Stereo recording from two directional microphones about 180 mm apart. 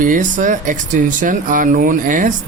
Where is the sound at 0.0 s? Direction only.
45° right (ahead or behind).